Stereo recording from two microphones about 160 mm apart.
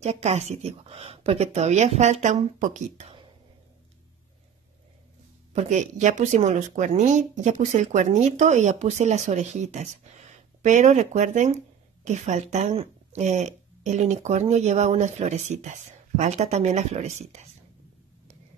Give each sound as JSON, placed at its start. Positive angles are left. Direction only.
{"t": 0.0, "sound": "speech", "side_deg": -40}
{"t": 5.5, "sound": "speech", "side_deg": -45}